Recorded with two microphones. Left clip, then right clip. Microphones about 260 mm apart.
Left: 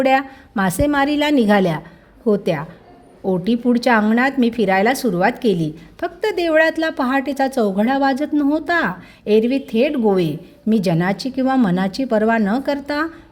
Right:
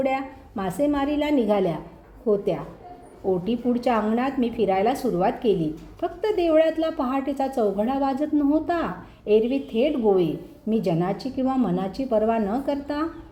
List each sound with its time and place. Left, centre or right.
0.0 s a woman's voice: left